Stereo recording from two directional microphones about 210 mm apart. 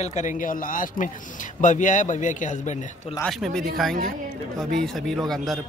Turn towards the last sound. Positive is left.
turn(degrees=0)  # may be behind; listen again after turning